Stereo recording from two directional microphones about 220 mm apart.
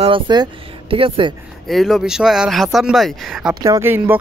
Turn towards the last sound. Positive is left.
turn(degrees=-10)  # may be behind; listen again after turning